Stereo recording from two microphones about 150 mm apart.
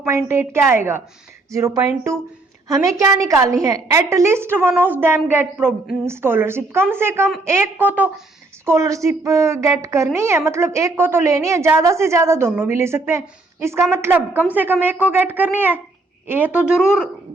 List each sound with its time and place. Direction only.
0.0 s a woman's voice: 20° right (ahead or behind)